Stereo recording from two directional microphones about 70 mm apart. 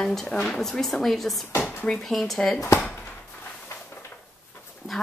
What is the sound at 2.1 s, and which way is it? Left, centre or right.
Speech, centre.